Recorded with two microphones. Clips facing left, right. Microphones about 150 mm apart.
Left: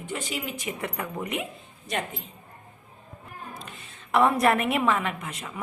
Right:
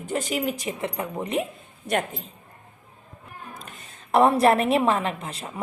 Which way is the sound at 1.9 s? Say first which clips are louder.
Right 6 dB; 55° right (ahead or behind).